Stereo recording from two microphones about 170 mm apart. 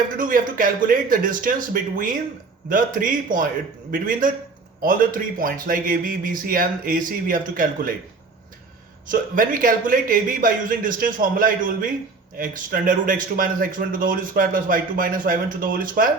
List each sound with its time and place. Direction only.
0.2 s a man's voice: 55° right (ahead or behind)
9.0 s speech: 50° right (ahead or behind)